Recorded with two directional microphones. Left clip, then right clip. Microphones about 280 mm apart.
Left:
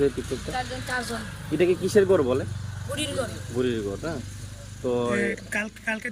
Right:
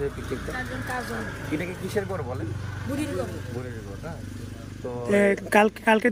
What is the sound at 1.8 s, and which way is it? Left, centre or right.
Speech, left.